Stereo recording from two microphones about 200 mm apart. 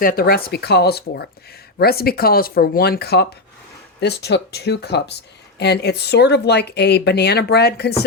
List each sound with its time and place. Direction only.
0.0 s speech: 45° left (ahead or behind)